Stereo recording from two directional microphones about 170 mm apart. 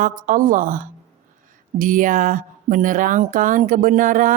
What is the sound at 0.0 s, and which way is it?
Speech, 50° right (ahead or behind).